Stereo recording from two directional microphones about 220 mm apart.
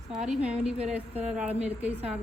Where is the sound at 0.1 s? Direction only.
5° right (ahead or behind).